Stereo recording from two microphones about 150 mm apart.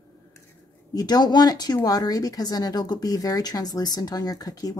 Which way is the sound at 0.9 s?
25° left (ahead or behind).